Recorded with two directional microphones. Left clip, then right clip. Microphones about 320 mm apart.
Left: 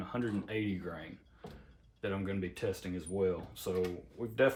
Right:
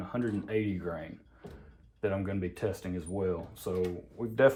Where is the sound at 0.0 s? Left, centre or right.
Centre.